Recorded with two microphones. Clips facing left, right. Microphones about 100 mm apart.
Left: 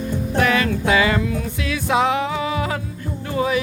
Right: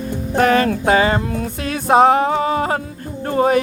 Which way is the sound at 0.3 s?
40° right (ahead or behind).